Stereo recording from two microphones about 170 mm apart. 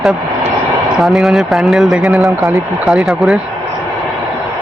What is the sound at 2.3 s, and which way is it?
Speech, 15° right (ahead or behind).